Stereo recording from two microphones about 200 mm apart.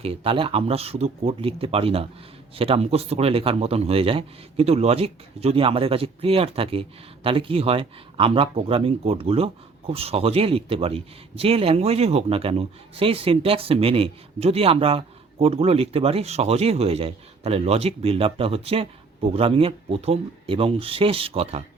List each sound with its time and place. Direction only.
0.0 s speech: 30° right (ahead or behind)